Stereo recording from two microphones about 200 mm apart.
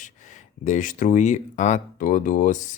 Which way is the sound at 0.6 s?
40° left (ahead or behind).